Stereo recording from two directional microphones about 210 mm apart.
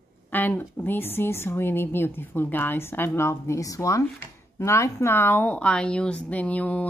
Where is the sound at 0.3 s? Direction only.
10° left (ahead or behind).